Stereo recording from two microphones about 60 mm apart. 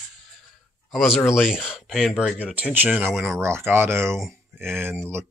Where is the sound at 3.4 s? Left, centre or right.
Right.